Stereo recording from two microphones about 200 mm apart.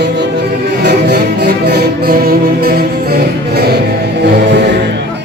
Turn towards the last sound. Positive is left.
turn(degrees=-60)  # may be behind; listen again after turning